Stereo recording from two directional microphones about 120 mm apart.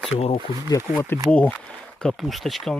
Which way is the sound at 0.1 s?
55° left (ahead or behind).